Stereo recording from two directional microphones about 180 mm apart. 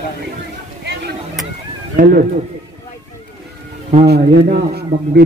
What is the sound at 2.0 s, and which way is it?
Speech, 50° right (ahead or behind).